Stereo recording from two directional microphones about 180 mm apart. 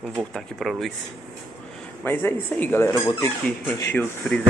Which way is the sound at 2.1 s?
10° left (ahead or behind).